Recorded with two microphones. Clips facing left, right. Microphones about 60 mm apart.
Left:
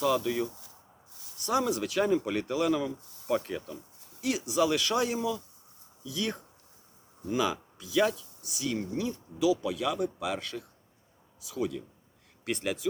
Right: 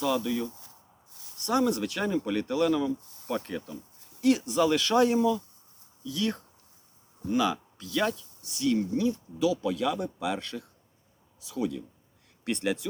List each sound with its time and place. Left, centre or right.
0.2 s speech: centre
1.5 s speech: centre